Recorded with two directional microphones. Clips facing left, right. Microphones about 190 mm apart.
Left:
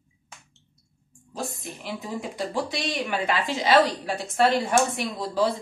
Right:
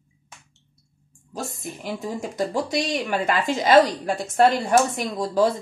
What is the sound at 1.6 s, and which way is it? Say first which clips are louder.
Speech: right 4 dB; 45° right (ahead or behind).